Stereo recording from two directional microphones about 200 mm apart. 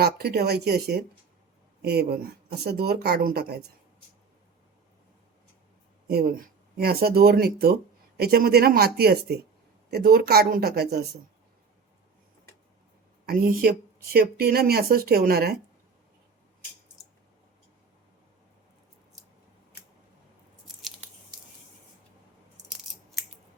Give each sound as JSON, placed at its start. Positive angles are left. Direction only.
{"t": 0.0, "sound": "speech", "side_deg": -50}
{"t": 6.1, "sound": "speech", "side_deg": -50}
{"t": 13.2, "sound": "speech", "side_deg": -50}